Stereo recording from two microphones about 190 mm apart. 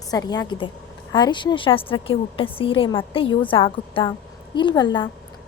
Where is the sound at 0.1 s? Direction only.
20° left (ahead or behind).